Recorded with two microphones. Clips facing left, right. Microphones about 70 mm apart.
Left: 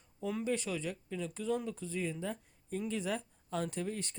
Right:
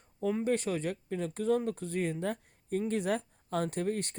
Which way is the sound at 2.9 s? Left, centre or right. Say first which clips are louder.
Right 5 dB; right.